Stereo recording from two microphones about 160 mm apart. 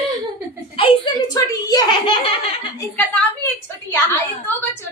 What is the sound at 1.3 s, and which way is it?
A child's voice, 25° left (ahead or behind).